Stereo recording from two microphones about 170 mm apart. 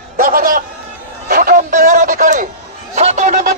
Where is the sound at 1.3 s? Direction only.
55° right (ahead or behind).